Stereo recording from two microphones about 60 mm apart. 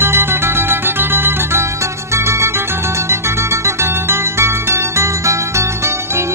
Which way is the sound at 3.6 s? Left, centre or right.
Right.